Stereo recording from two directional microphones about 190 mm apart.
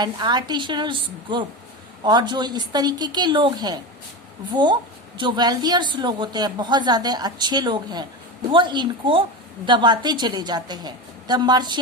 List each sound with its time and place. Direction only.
0.0 s a woman's voice: 20° right (ahead or behind)